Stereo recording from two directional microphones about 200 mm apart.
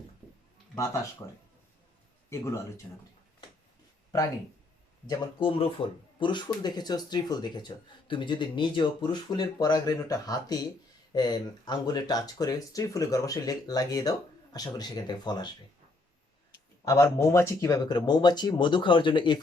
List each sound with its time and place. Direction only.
2.3 s speech: 15° left (ahead or behind)
5.0 s speech: 25° left (ahead or behind)
16.8 s speech: 15° left (ahead or behind)